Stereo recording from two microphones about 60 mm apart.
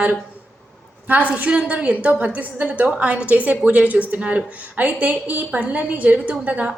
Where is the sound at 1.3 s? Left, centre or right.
Right.